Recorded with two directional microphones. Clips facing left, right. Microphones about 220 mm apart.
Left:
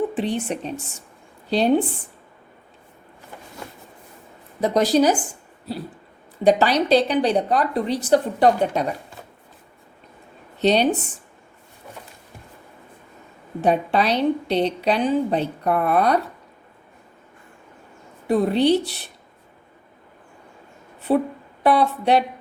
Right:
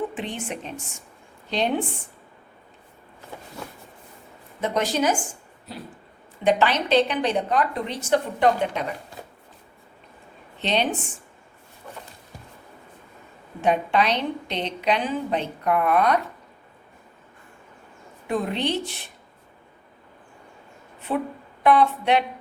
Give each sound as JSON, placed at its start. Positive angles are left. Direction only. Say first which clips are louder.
{"t": 0.1, "sound": "a woman's voice", "louder": "left 7 dB", "side_deg": 35}
{"t": 4.6, "sound": "a woman's voice", "louder": "left 6 dB", "side_deg": 35}
{"t": 6.4, "sound": "a woman's voice", "louder": "left 4 dB", "side_deg": 35}
{"t": 10.6, "sound": "a woman's voice", "louder": "left 7 dB", "side_deg": 40}
{"t": 13.6, "sound": "a woman's voice", "louder": "left 2 dB", "side_deg": 35}
{"t": 18.3, "sound": "a woman's voice", "louder": "left 8 dB", "side_deg": 35}
{"t": 21.1, "sound": "a woman's voice", "louder": "left 7 dB", "side_deg": 35}